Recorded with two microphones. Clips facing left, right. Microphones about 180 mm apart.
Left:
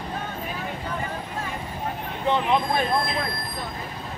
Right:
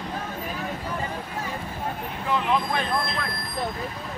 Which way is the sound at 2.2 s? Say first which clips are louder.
Left 2 dB; 25° left (ahead or behind).